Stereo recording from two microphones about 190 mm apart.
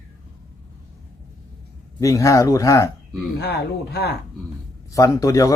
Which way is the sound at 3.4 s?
60° left (ahead or behind).